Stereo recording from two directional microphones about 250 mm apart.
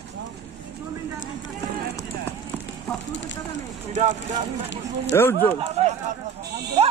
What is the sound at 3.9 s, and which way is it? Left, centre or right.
Speech, right.